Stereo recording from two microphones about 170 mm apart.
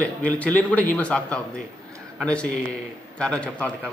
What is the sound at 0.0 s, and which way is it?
A man's voice, 10° left (ahead or behind).